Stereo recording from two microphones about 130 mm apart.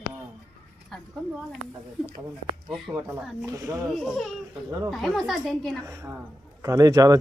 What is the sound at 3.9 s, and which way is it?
A woman's voice, centre (ahead or behind).